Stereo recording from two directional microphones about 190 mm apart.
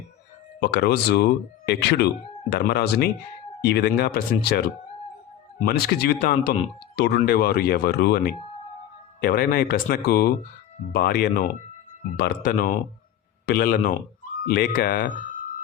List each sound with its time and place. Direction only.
0.6 s speech: 60° left (ahead or behind)